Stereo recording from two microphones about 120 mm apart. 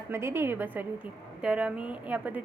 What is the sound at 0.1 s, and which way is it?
A woman's voice, 20° right (ahead or behind).